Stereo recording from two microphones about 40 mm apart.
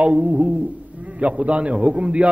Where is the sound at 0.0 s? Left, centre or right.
Right.